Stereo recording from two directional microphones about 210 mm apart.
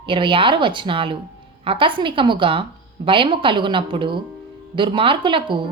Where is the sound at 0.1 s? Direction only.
25° right (ahead or behind).